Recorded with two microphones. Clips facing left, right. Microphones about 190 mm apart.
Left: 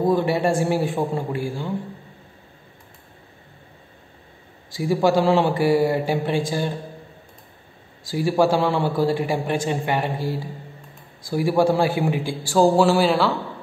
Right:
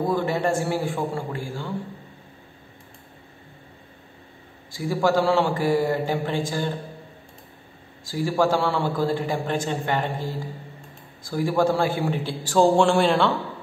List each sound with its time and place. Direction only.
0.0 s a man's voice: 15° left (ahead or behind)
4.7 s a man's voice: 15° left (ahead or behind)
8.1 s a man's voice: 15° left (ahead or behind)